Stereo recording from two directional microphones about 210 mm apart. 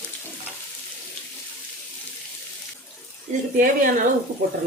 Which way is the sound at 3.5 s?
40° right (ahead or behind).